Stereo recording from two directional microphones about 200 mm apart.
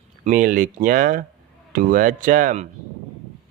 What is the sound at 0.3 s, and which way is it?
Speech, 40° right (ahead or behind).